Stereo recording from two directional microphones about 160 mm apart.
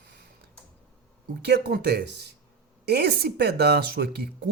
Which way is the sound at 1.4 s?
90° right.